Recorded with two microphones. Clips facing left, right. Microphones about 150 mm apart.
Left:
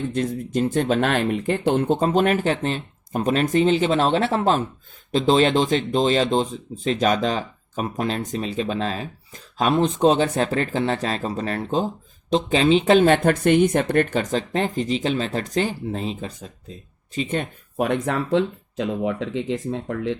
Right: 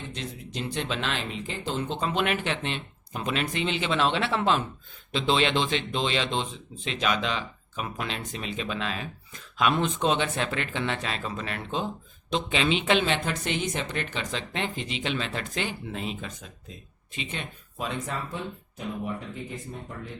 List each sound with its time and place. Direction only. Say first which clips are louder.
0.1 s speech: left 13 dB; 50° left (ahead or behind)
17.2 s speech: left 11 dB; 50° left (ahead or behind); by 20.1 s 90° left